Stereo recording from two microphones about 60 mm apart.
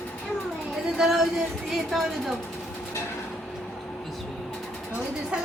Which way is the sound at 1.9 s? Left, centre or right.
Centre.